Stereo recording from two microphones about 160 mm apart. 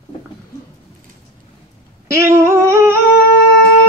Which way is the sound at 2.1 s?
15° right (ahead or behind).